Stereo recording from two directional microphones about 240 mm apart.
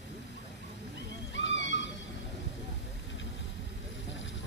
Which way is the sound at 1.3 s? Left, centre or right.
Left.